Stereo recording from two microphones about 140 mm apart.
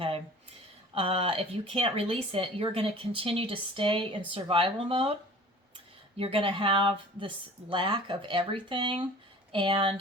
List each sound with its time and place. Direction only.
0.9 s speech: 40° right (ahead or behind)
6.1 s speech: 40° right (ahead or behind)